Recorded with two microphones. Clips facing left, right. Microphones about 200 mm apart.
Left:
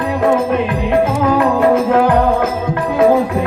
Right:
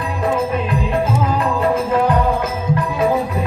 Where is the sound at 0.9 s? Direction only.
70° left (ahead or behind).